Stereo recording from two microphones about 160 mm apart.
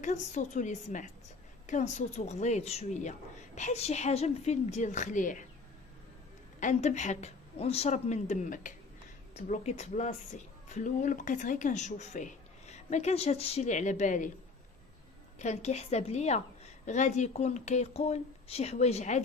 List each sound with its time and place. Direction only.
0.0 s speech: 50° left (ahead or behind)
6.6 s speech: 50° left (ahead or behind)
15.4 s speech: 45° left (ahead or behind)